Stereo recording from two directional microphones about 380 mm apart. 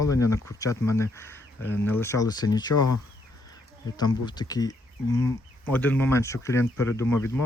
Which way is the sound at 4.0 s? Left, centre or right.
Centre.